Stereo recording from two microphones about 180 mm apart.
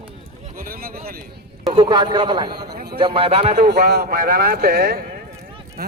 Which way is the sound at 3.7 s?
65° right (ahead or behind).